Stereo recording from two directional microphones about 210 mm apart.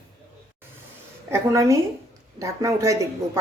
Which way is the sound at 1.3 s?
15° right (ahead or behind).